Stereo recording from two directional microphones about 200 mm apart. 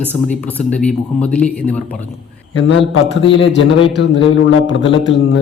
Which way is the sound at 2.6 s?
70° left (ahead or behind).